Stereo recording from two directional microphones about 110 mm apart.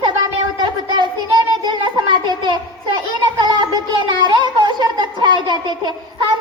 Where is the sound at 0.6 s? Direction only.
40° right (ahead or behind).